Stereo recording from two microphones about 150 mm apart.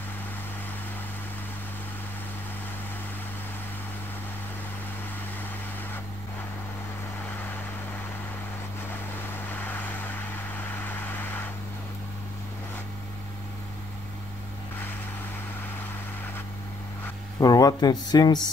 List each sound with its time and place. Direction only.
9.5 s vehicle: 10° left (ahead or behind)
17.4 s speech: 25° left (ahead or behind)